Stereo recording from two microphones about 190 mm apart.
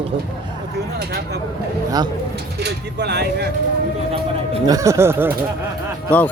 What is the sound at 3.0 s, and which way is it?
Speech, 60° right (ahead or behind).